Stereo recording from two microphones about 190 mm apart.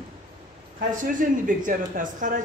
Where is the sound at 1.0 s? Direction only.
45° right (ahead or behind).